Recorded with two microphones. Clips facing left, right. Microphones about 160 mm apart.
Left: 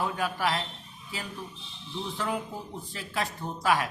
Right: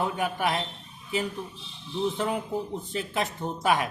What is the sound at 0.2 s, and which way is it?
Speech, 20° right (ahead or behind).